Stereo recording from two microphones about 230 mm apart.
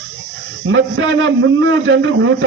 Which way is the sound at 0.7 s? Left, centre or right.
Right.